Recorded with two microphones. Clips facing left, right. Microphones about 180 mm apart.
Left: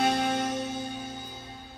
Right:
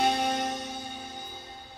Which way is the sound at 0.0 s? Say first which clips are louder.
Left 1 dB; centre (ahead or behind).